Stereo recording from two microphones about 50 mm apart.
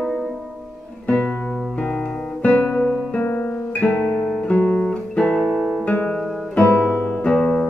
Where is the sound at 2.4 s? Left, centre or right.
Left.